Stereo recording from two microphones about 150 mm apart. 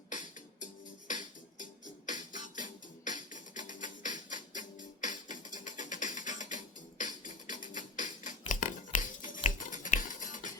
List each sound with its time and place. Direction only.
0.6 s music: 60° left (ahead or behind)